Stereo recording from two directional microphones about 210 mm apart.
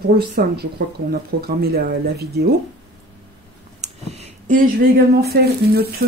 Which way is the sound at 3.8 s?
30° right (ahead or behind).